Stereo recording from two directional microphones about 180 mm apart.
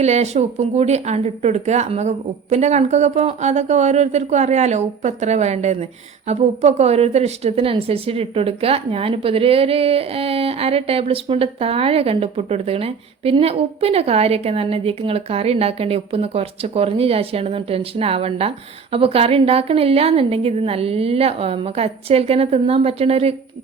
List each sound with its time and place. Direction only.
0.0 s a woman's voice: 40° right (ahead or behind)